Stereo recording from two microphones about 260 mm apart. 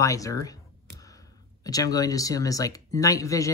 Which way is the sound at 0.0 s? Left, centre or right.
Centre.